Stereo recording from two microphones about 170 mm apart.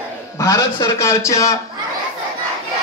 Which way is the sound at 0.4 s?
20° left (ahead or behind).